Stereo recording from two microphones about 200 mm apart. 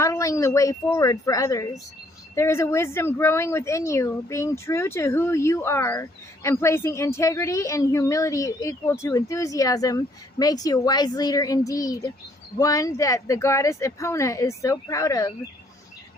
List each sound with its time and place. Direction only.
0.0 s speech: 15° left (ahead or behind)